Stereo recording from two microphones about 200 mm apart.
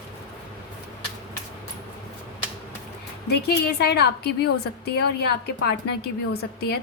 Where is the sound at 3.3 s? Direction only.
55° left (ahead or behind).